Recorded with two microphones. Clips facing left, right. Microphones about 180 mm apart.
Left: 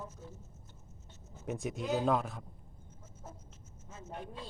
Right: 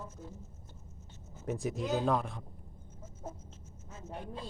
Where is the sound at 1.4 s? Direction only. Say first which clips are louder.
Right 2 dB; centre (ahead or behind).